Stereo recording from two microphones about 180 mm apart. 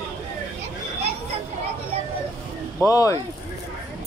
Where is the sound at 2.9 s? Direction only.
20° left (ahead or behind).